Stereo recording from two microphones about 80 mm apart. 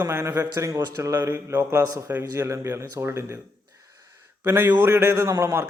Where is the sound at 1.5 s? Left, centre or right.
Right.